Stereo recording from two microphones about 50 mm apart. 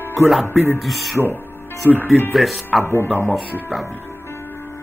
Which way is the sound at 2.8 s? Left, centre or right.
Left.